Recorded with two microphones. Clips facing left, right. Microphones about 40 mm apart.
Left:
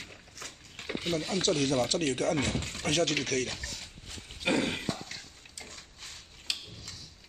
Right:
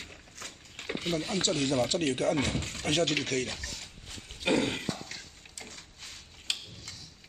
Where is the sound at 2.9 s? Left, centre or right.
Centre.